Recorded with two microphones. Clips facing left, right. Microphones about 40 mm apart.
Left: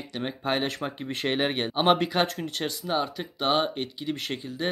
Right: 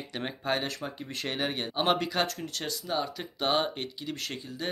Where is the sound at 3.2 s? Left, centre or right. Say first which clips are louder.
Left 1 dB; centre.